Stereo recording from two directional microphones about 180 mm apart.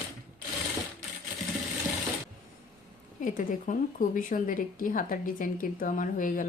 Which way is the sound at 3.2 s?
50° left (ahead or behind).